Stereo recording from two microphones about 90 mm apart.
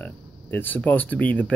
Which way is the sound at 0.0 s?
20° left (ahead or behind).